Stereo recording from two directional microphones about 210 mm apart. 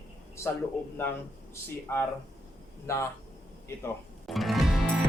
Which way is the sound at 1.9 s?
10° left (ahead or behind).